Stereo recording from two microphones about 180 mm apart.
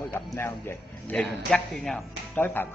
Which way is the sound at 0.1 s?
10° left (ahead or behind).